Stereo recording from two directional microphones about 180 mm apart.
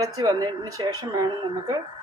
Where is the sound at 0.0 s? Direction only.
20° right (ahead or behind).